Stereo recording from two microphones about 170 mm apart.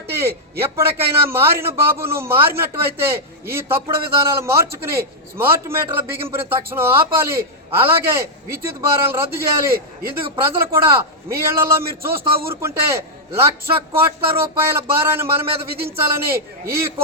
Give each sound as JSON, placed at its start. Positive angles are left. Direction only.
{"t": 0.1, "sound": "a sound", "side_deg": -15}
{"t": 0.8, "sound": "a man's voice", "side_deg": -15}
{"t": 9.7, "sound": "a man's voice", "side_deg": -60}
{"t": 10.4, "sound": "a man's voice", "side_deg": -15}